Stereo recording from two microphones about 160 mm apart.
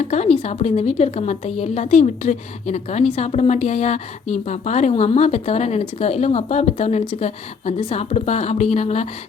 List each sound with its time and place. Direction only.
0.0 s a woman's voice: 45° left (ahead or behind)